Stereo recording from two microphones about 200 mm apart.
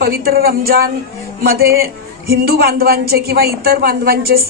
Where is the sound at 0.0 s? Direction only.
50° right (ahead or behind).